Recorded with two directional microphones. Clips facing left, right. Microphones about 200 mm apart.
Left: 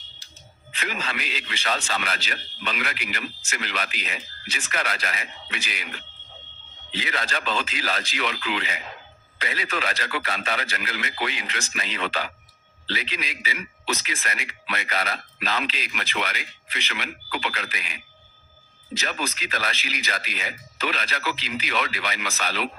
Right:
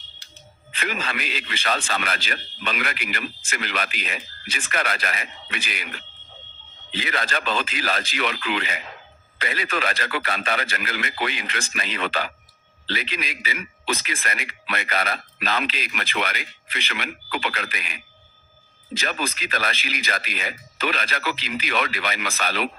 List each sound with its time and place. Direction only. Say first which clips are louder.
0.7 s a man's voice: right 2 dB; 55° right (ahead or behind)
6.9 s a man's voice: right 2 dB; 55° right (ahead or behind)
18.9 s a man's voice: right 2 dB; 55° right (ahead or behind)